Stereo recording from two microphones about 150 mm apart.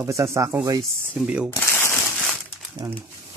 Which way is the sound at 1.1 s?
5° right (ahead or behind).